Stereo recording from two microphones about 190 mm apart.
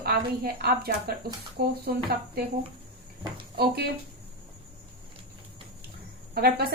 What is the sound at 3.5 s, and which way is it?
Speech, 55° right (ahead or behind).